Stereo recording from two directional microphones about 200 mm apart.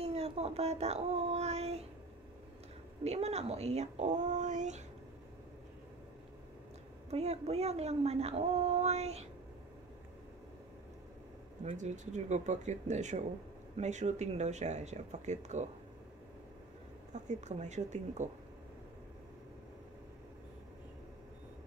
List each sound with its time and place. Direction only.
0.0 s child singing: 30° right (ahead or behind)
3.0 s speech: 30° right (ahead or behind)
7.1 s speech: 30° right (ahead or behind)
11.6 s speech: 35° right (ahead or behind)
17.1 s speech: 35° right (ahead or behind)